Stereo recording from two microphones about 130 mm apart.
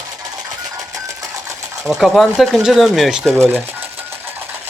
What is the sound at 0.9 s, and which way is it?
Sewing machine, 25° right (ahead or behind).